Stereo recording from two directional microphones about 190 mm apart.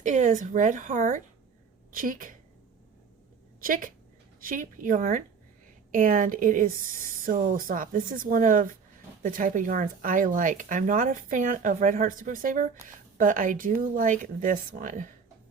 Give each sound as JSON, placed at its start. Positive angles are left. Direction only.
{"t": 0.0, "sound": "speech", "side_deg": -40}
{"t": 3.6, "sound": "speech", "side_deg": -45}